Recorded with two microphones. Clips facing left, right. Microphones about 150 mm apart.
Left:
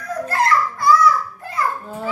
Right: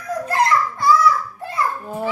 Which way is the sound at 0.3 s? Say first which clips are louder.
Right 1 dB; 20° right (ahead or behind).